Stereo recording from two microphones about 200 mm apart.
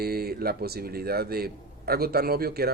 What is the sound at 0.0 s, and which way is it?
Speech, 50° right (ahead or behind).